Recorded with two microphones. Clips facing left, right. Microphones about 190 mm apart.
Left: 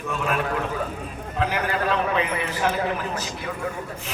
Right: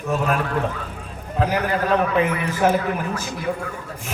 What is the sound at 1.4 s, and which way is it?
A man's voice, 40° right (ahead or behind).